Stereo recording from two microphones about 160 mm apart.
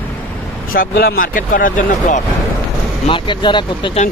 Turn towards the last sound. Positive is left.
turn(degrees=30)  # may be behind; listen again after turning